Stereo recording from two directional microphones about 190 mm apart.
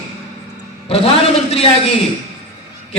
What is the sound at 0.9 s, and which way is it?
Speech, 30° left (ahead or behind).